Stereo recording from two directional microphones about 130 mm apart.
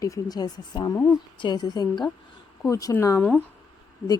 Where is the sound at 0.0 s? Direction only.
30° left (ahead or behind).